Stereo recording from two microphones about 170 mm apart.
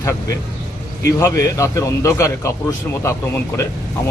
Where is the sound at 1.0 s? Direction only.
15° left (ahead or behind).